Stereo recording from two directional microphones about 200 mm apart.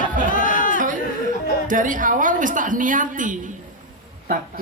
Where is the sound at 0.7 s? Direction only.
40° right (ahead or behind).